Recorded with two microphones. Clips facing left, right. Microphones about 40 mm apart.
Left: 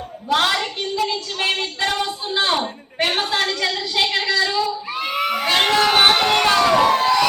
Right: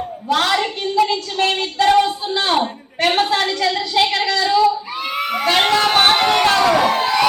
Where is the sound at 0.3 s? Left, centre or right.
Centre.